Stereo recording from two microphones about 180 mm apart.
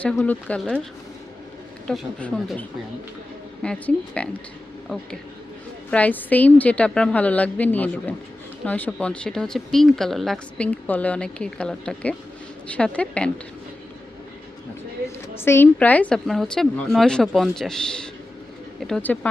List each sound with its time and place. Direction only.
0.0 s speech: 5° left (ahead or behind)
1.9 s speech: 5° left (ahead or behind)
5.9 s a woman's voice: 10° left (ahead or behind)
15.4 s a woman's voice: 15° left (ahead or behind)